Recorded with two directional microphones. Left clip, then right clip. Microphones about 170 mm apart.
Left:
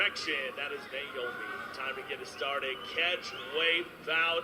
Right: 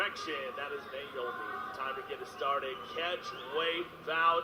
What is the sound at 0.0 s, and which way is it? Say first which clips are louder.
A man's voice: left 4 dB; 40° left (ahead or behind).